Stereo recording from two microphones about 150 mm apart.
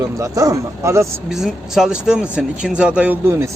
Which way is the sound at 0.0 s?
20° right (ahead or behind).